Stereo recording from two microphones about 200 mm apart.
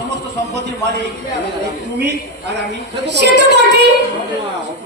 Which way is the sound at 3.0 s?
60° right (ahead or behind).